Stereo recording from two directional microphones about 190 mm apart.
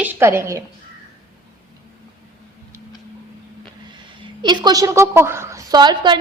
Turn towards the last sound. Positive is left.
turn(degrees=-25)  # may be behind; listen again after turning